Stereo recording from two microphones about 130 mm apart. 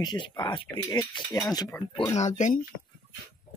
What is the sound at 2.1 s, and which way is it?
Speech, 65° left (ahead or behind).